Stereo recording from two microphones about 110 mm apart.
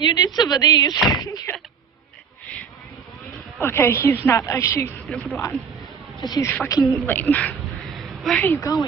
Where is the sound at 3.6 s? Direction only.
20° left (ahead or behind).